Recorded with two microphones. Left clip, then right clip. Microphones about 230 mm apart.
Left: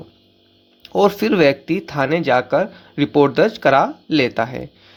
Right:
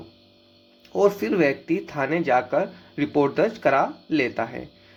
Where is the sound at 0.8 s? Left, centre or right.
Left.